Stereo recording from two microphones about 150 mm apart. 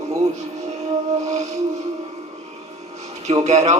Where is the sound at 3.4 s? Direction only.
45° right (ahead or behind).